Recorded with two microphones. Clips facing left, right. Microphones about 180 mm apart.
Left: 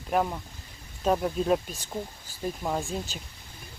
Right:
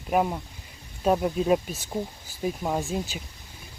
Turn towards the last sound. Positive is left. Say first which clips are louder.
# right 3 dB
turn(degrees=-5)  # may be behind; listen again after turning